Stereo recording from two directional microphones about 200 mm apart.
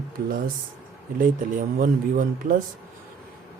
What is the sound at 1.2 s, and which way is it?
Speech, 40° right (ahead or behind).